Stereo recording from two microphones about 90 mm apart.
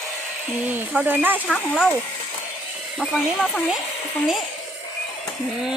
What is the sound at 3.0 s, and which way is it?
Speech, centre (ahead or behind).